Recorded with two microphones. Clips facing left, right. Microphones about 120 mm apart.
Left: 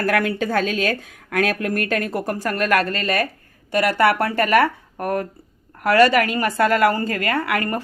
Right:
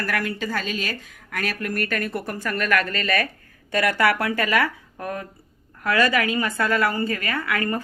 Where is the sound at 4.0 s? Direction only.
50° left (ahead or behind).